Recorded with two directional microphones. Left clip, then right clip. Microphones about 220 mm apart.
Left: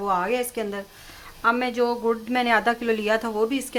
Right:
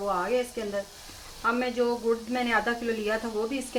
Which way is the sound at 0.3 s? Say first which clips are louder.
Left 3 dB; 45° left (ahead or behind).